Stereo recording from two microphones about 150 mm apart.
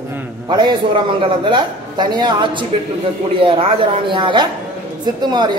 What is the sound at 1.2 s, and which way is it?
Speech, 35° right (ahead or behind).